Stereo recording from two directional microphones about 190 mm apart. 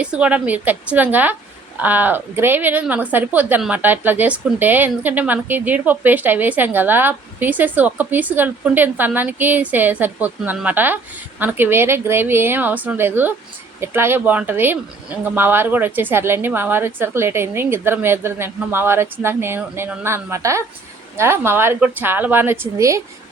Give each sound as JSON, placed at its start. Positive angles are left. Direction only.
{"t": 0.0, "sound": "a woman's voice", "side_deg": -5}